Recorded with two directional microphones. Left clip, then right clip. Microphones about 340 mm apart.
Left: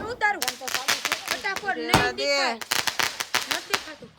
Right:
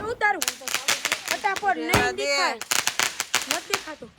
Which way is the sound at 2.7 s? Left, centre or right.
Centre.